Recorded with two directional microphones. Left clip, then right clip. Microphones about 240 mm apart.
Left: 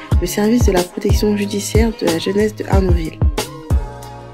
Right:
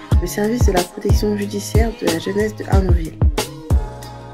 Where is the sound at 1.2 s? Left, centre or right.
Left.